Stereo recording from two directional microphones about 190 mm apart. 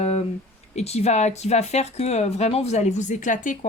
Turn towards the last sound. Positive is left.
turn(degrees=45)  # may be behind; listen again after turning